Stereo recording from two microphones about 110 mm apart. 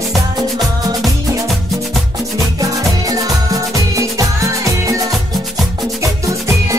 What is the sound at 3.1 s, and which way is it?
Music, 35° right (ahead or behind).